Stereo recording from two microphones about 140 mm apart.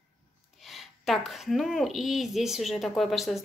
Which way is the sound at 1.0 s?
Centre (ahead or behind).